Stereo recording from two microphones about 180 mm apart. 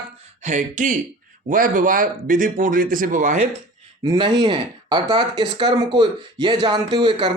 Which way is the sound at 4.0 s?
25° right (ahead or behind).